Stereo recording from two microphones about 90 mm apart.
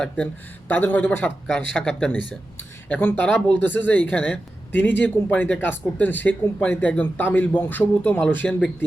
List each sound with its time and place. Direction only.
0.7 s a man's voice: 20° left (ahead or behind)
1.5 s speech: 10° left (ahead or behind)
2.6 s a man's voice: 20° left (ahead or behind)